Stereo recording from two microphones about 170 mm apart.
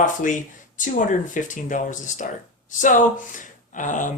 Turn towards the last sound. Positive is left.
turn(degrees=50)  # may be behind; listen again after turning